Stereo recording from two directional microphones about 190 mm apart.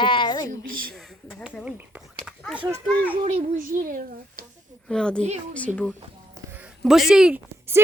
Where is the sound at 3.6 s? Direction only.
45° right (ahead or behind).